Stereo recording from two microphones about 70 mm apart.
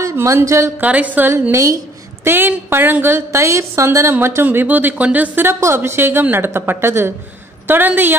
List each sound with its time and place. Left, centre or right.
0.0 s a sound: right
0.7 s a woman's voice: right
1.5 s a woman's voice: right
2.2 s a woman's voice: right
3.3 s a woman's voice: right